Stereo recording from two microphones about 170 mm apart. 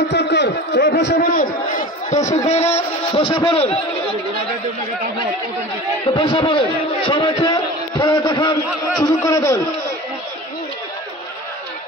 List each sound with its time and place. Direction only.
0.1 s a man's voice: 90° left; by 2.8 s 40° left (ahead or behind)
3.1 s a man's voice: 30° left (ahead or behind)
6.1 s a sound: 30° left (ahead or behind)